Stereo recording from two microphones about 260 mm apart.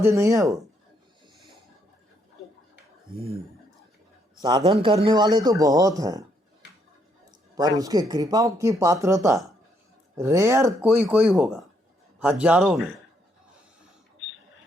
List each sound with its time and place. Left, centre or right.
0.0 s speech: centre
4.4 s a man's voice: centre
7.3 s a sound: centre
7.8 s speech: centre